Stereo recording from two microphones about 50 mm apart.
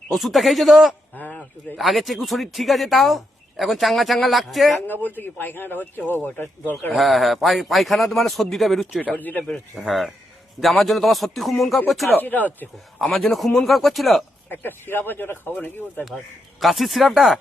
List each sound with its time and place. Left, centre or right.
0.1 s speech: centre
1.1 s a sound: left
1.4 s speech: centre
4.9 s speech: left
6.9 s speech: centre
9.1 s speech: left
9.7 s speech: centre
12.1 s speech: left
13.0 s speech: centre
14.5 s speech: left
16.6 s speech: centre